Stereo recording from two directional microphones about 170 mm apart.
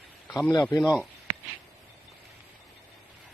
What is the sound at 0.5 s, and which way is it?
Speech, 20° left (ahead or behind).